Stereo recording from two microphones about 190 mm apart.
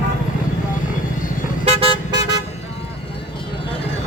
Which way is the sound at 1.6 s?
30° right (ahead or behind).